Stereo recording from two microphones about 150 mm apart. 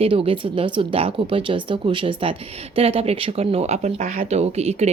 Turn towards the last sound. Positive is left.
turn(degrees=-45)  # may be behind; listen again after turning